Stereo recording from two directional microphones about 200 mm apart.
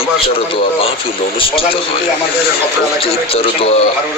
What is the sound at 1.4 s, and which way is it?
Speech, 30° left (ahead or behind).